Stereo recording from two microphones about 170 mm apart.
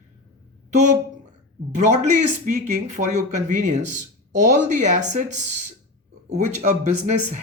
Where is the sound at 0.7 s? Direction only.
45° right (ahead or behind).